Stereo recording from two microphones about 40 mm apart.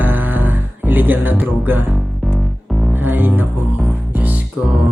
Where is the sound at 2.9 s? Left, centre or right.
Right.